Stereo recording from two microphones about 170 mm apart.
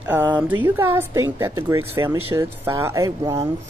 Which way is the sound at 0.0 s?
10° right (ahead or behind).